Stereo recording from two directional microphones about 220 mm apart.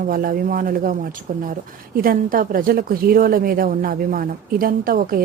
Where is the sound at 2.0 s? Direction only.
40° right (ahead or behind).